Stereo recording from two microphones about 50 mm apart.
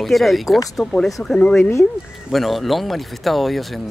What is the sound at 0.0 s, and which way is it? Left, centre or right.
Speech, centre.